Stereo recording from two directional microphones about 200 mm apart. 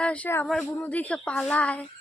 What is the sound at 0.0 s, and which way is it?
A woman's voice, 5° left (ahead or behind).